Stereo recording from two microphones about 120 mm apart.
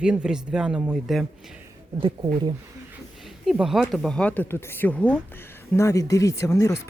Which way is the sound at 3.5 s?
5° right (ahead or behind).